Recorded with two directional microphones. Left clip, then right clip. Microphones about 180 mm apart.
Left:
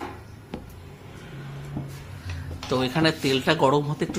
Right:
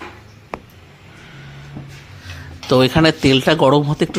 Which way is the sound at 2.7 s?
45° right (ahead or behind).